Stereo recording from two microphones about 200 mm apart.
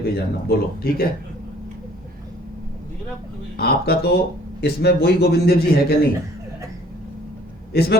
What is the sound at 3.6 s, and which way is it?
A man's voice, 50° left (ahead or behind).